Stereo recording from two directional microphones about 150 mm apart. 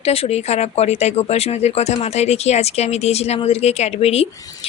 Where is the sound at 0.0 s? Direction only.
40° left (ahead or behind).